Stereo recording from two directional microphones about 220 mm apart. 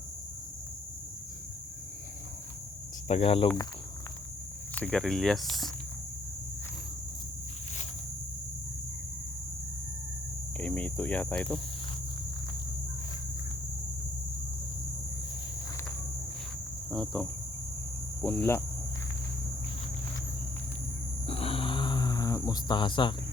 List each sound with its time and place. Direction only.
3.1 s speech: 25° left (ahead or behind)
4.7 s speech: 5° left (ahead or behind)
10.6 s cricket: 5° left (ahead or behind)
16.9 s speech: centre (ahead or behind)
18.2 s cricket: 5° left (ahead or behind)
21.2 s snoring: 25° left (ahead or behind)